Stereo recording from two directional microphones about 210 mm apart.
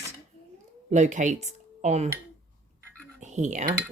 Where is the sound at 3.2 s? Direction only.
35° right (ahead or behind).